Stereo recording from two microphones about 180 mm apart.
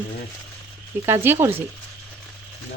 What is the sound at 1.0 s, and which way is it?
Speech, 15° right (ahead or behind).